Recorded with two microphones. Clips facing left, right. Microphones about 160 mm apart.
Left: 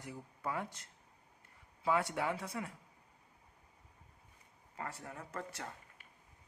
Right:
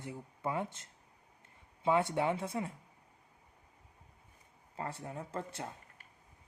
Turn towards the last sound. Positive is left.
turn(degrees=-25)  # may be behind; listen again after turning